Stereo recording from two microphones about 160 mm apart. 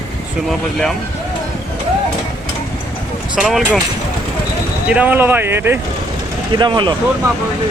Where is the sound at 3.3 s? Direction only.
5° right (ahead or behind).